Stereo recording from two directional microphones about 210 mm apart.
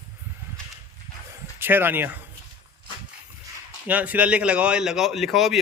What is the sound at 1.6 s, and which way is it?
Speech, 10° right (ahead or behind).